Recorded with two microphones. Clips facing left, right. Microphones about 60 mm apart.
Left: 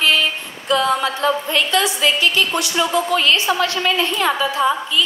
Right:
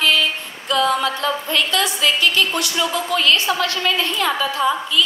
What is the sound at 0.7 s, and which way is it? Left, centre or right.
A woman's voice, left.